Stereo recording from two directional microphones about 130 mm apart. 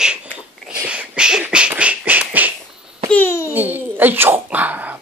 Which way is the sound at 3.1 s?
20° left (ahead or behind).